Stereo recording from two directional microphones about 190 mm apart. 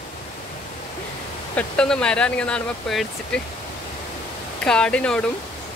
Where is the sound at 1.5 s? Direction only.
5° left (ahead or behind).